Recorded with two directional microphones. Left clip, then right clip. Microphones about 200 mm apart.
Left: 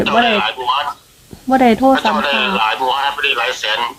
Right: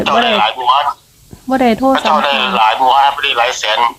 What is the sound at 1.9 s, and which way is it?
Radio, 50° right (ahead or behind).